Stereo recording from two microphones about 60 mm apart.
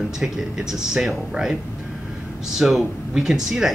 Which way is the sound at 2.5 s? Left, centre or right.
Centre.